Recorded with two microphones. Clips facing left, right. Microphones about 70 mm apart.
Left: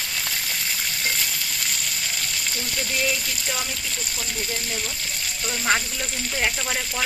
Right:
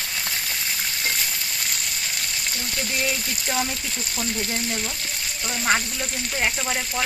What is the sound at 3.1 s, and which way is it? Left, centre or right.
Speech, right.